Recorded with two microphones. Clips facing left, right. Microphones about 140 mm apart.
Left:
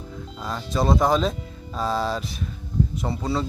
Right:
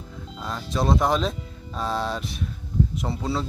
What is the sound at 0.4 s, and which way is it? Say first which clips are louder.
Speech: left 1 dB; centre (ahead or behind).